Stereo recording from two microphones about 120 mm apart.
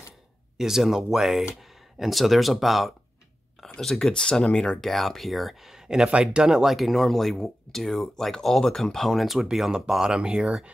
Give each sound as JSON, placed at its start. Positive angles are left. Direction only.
{"t": 0.6, "sound": "speech", "side_deg": -5}